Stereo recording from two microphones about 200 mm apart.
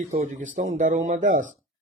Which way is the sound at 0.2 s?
40° right (ahead or behind).